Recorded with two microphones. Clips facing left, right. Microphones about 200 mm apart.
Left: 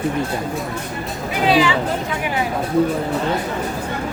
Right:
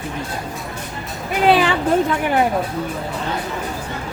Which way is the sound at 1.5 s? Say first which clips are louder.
Right 1 dB; 55° right (ahead or behind).